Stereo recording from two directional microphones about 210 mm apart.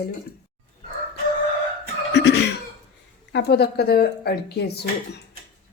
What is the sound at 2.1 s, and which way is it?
Music, 55° left (ahead or behind).